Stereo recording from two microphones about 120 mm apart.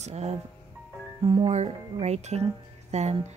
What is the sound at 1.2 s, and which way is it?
Speech, 50° right (ahead or behind).